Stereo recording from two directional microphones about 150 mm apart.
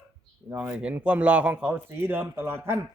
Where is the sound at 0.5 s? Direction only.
5° right (ahead or behind).